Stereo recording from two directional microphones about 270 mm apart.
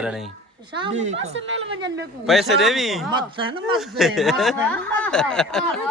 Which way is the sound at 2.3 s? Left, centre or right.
Centre.